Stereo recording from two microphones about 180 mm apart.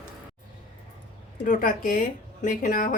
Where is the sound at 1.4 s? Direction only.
50° left (ahead or behind).